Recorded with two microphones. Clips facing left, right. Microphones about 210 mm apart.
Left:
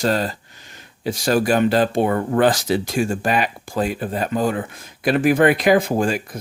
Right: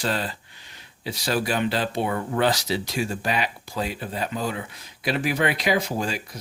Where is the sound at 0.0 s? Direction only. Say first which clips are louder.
Left 7 dB; 45° left (ahead or behind).